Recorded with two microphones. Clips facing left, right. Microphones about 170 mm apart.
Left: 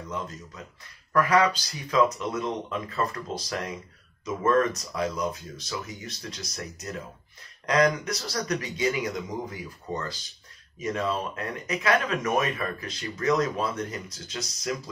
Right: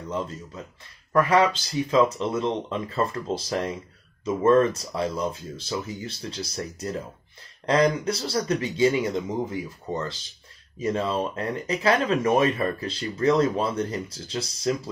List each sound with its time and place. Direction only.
0.1 s speech: 30° right (ahead or behind)